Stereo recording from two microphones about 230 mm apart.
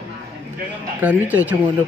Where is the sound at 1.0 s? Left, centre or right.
Centre.